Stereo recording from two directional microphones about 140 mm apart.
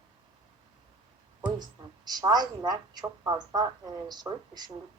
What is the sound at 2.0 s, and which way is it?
A woman's voice, 30° right (ahead or behind).